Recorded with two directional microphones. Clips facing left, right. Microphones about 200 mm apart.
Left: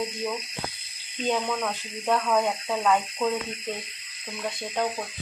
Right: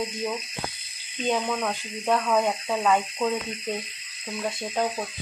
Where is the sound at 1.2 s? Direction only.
5° right (ahead or behind).